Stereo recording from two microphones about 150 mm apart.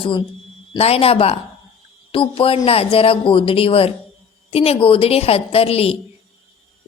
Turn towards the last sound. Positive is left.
turn(degrees=40)  # may be behind; listen again after turning